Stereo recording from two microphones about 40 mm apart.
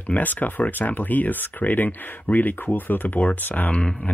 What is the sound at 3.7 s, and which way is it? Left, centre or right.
Speech, left.